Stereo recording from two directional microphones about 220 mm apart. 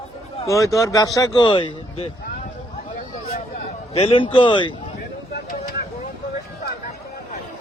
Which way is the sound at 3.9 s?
25° left (ahead or behind).